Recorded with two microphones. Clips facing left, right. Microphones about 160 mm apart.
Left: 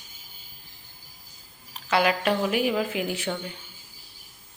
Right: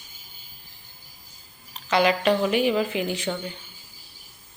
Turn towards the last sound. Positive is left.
turn(degrees=5)  # may be behind; listen again after turning